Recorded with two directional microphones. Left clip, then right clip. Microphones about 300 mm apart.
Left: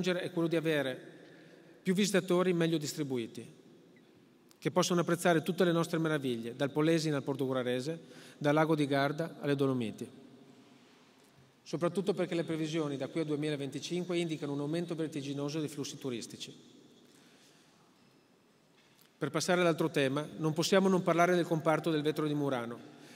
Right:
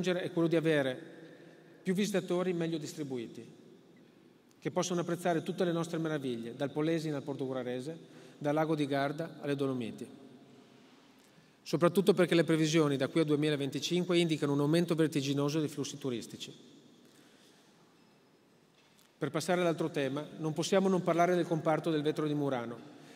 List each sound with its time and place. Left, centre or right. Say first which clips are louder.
0.0 s a man's voice: right 1 dB; centre
1.9 s a man's voice: left 2 dB; centre
4.6 s a man's voice: left 3 dB; left
11.6 s a man's voice: right 5 dB; centre
19.1 s a man's voice: left 1 dB; centre